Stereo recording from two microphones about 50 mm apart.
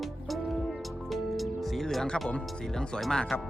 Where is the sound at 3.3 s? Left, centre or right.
Left.